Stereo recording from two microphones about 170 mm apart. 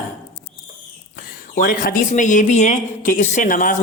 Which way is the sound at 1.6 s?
55° left (ahead or behind).